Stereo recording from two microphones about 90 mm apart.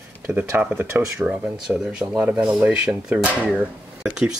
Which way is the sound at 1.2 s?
10° right (ahead or behind).